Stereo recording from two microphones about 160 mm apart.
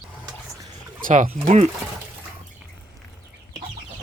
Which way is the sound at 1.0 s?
55° right (ahead or behind).